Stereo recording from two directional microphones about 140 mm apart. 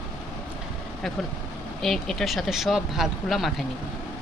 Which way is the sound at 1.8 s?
Centre (ahead or behind).